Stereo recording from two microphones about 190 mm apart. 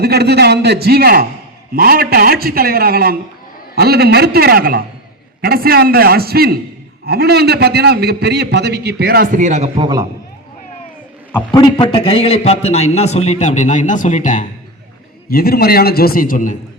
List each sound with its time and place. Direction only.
0.0 s a man's voice: 60° right (ahead or behind); by 9.8 s 40° right (ahead or behind)
11.5 s a man's voice: 25° left (ahead or behind); by 14.4 s 40° left (ahead or behind)
15.3 s a man's voice: 55° left (ahead or behind)